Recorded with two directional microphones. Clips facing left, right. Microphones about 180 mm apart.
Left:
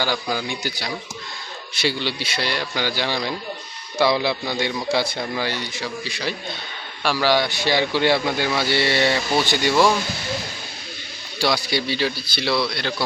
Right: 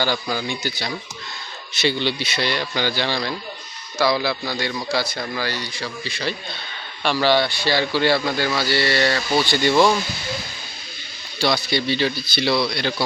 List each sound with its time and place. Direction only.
0.0 s a man's voice: 10° left (ahead or behind)
11.3 s a man's voice: 10° left (ahead or behind)